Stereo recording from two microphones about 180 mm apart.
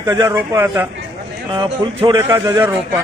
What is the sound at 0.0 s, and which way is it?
Speech, 20° right (ahead or behind).